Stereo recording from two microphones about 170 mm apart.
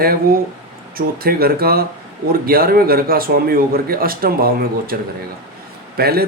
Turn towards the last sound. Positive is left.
turn(degrees=-65)  # may be behind; listen again after turning